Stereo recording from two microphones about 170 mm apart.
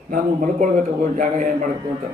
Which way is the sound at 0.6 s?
50° right (ahead or behind).